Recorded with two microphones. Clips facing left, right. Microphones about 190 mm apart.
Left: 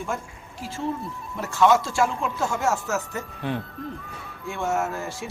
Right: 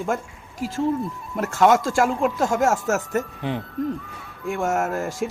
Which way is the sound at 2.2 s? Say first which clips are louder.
Right 6 dB; 85° right.